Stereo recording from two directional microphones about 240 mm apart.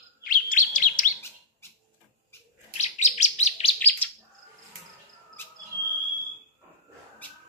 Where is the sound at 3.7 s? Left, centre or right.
Centre.